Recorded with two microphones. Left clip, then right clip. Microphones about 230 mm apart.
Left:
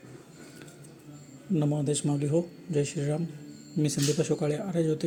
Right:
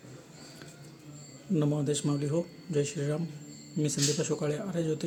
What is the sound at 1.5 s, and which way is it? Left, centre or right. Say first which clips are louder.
Speech: left 1 dB; centre.